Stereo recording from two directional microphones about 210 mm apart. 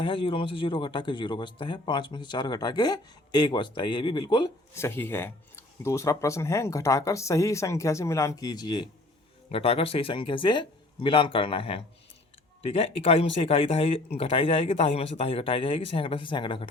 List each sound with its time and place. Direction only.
0.0 s a man's voice: 25° left (ahead or behind)